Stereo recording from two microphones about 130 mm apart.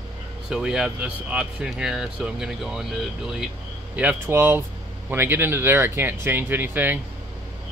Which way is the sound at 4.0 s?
15° right (ahead or behind).